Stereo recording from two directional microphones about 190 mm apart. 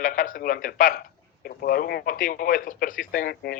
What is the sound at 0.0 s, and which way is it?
A man's voice, 45° left (ahead or behind).